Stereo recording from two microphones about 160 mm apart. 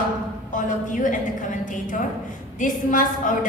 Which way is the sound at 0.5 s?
55° left (ahead or behind).